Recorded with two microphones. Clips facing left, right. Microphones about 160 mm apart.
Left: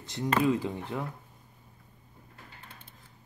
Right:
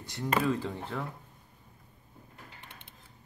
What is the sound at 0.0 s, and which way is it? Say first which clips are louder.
Speech: left 3 dB; 20° left (ahead or behind).